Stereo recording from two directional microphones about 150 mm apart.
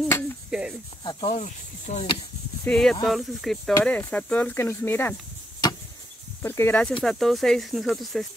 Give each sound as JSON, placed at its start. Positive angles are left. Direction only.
{"t": 0.5, "sound": "a sound", "side_deg": -5}
{"t": 1.0, "sound": "speech", "side_deg": 40}
{"t": 2.6, "sound": "speech", "side_deg": 5}
{"t": 5.6, "sound": "tick-tock", "side_deg": 30}
{"t": 6.4, "sound": "speech", "side_deg": 15}
{"t": 7.0, "sound": "speech", "side_deg": 0}